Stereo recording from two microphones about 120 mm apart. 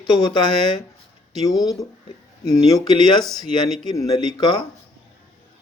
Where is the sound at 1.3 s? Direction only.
Centre (ahead or behind).